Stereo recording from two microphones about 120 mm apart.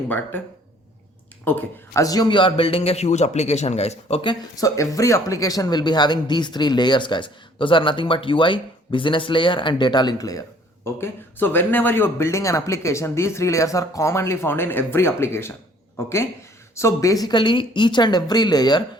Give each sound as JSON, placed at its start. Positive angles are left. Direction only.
{"t": 1.9, "sound": "a man's voice", "side_deg": 30}
{"t": 4.5, "sound": "speech", "side_deg": 30}
{"t": 10.8, "sound": "speech", "side_deg": 20}